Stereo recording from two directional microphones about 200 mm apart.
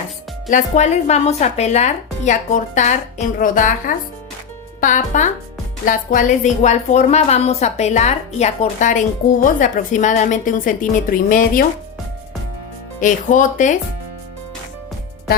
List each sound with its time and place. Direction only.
0.5 s a woman's voice: 35° left (ahead or behind)
13.0 s a woman's voice: 40° left (ahead or behind)